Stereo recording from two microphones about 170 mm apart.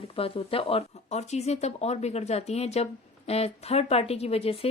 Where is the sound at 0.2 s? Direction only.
35° left (ahead or behind).